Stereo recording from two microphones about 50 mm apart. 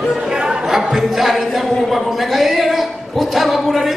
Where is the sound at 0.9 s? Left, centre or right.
Centre.